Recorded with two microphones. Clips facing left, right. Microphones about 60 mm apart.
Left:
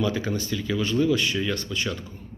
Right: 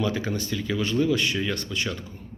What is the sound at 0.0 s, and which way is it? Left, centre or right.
A man's voice, right.